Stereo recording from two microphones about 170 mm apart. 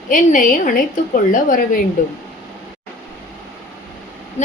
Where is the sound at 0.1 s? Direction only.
50° left (ahead or behind).